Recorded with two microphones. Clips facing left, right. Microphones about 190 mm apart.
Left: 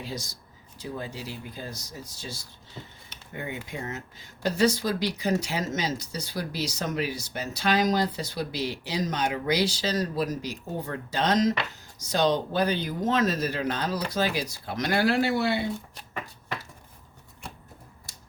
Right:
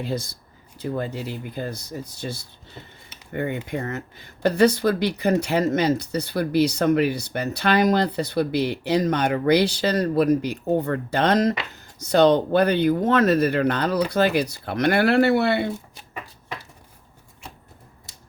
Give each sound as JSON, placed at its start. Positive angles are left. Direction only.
{"t": 0.0, "sound": "speech", "side_deg": -55}